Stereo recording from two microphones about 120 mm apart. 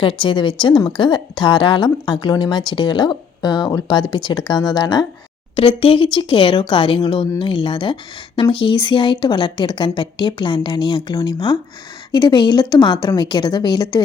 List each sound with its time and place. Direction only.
0.0 s a woman's voice: 45° left (ahead or behind)
5.5 s a woman's voice: 50° left (ahead or behind)